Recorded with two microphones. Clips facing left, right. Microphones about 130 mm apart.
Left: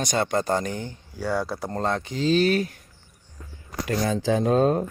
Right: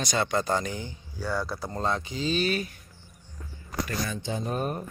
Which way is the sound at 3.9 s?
75° left (ahead or behind).